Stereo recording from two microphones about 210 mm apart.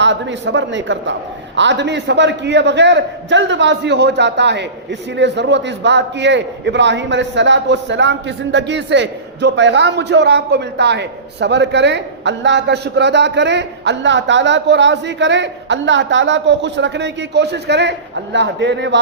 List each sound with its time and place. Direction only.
0.0 s a man's voice: 60° right (ahead or behind)